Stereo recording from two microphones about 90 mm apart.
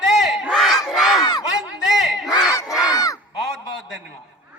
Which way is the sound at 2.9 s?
40° left (ahead or behind).